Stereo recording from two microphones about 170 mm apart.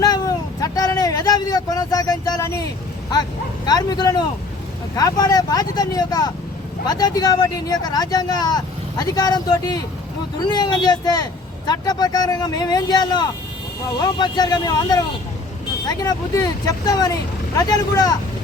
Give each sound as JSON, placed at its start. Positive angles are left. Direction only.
{"t": 0.0, "sound": "vehicle", "side_deg": 20}
{"t": 3.7, "sound": "speech", "side_deg": 20}